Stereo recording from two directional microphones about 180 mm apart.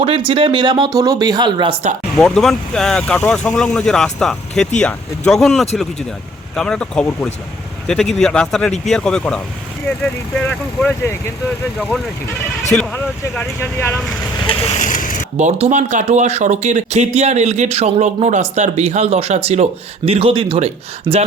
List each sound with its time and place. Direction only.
0.3 s speech: 30° right (ahead or behind)
2.1 s speech: centre (ahead or behind)
12.7 s speech: 5° left (ahead or behind)
14.4 s vehicle: 30° left (ahead or behind)
15.4 s speech: 40° right (ahead or behind)